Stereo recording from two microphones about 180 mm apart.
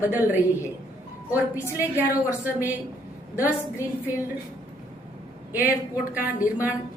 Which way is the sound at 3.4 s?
15° left (ahead or behind).